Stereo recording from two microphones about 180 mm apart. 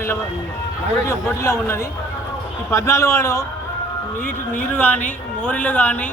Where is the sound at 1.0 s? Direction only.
15° left (ahead or behind).